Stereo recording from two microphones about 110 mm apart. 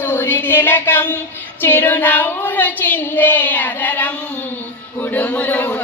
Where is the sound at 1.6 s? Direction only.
20° left (ahead or behind).